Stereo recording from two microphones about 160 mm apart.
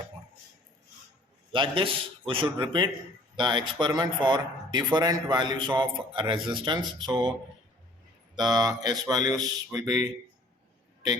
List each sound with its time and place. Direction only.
1.5 s a man's voice: 35° right (ahead or behind)
8.4 s speech: 25° right (ahead or behind)